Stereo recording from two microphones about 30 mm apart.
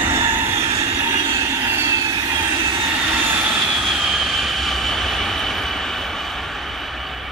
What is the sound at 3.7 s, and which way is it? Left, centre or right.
Train, centre.